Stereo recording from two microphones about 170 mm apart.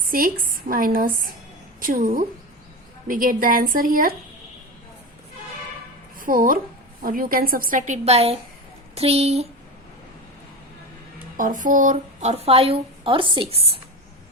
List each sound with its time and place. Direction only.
0.0 s a woman's voice: 55° right (ahead or behind)
6.1 s a woman's voice: 55° right (ahead or behind); by 9.5 s 40° right (ahead or behind)
11.3 s a woman's voice: 50° right (ahead or behind); by 13.7 s 35° right (ahead or behind)